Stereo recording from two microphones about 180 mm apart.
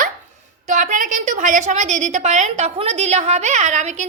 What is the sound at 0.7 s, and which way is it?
A woman's voice, 45° right (ahead or behind).